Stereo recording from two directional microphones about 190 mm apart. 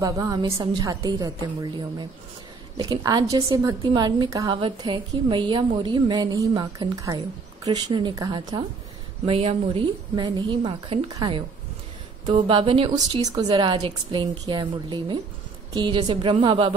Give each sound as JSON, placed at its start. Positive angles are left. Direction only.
{"t": 0.0, "sound": "a woman's voice", "side_deg": -20}